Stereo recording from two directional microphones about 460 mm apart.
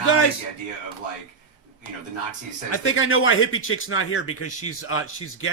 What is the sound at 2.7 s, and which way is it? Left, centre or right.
Speech, left.